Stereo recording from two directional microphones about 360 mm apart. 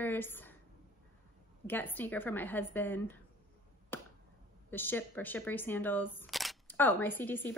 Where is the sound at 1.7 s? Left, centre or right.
Centre.